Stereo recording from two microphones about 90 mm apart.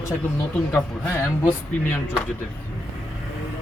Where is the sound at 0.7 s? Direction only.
20° left (ahead or behind).